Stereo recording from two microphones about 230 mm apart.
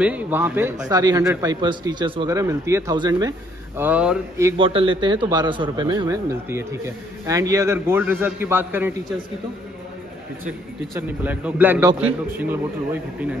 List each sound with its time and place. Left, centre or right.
0.0 s speech: centre
11.0 s speech: centre